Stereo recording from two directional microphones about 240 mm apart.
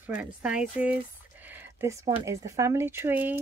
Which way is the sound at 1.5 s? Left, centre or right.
Centre.